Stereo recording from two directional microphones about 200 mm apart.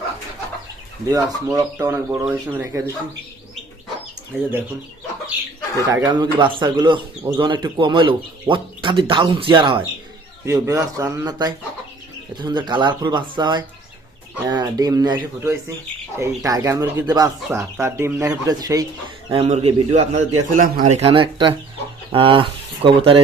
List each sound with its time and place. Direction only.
1.1 s speech: 15° right (ahead or behind)
5.9 s speech: 20° right (ahead or behind)
19.3 s a man's voice: 30° right (ahead or behind)